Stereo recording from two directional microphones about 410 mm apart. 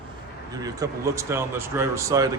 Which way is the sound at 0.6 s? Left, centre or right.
Centre.